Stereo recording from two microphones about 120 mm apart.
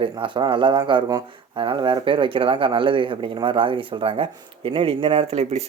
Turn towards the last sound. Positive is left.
turn(degrees=-60)  # may be behind; listen again after turning